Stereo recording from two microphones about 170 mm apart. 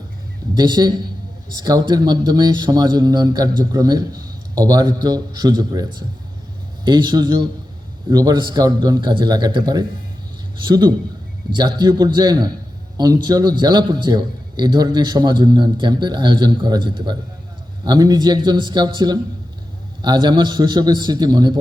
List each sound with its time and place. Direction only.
0.5 s speech: 25° right (ahead or behind)